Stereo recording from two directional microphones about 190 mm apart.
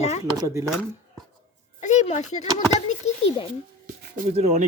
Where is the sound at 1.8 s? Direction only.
35° left (ahead or behind).